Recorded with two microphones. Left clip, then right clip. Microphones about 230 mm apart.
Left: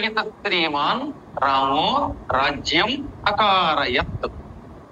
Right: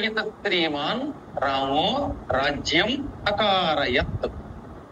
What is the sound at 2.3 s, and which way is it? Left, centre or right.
A woman's voice, centre.